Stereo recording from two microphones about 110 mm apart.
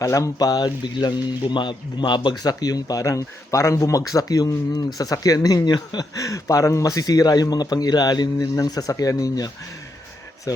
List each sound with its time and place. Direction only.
0.0 s speech: 30° left (ahead or behind)